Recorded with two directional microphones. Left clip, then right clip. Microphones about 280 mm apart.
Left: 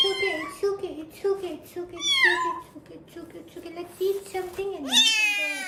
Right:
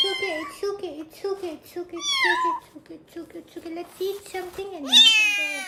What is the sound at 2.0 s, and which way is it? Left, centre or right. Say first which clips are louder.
A child's voice: left 1 dB; centre.